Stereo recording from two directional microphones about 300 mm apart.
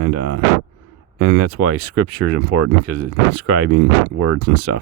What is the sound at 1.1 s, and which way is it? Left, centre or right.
Speech, right.